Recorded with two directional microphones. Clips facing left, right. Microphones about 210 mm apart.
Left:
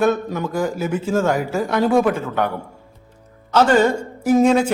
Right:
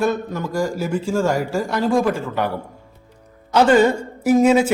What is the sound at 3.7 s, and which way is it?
Speech, 10° right (ahead or behind).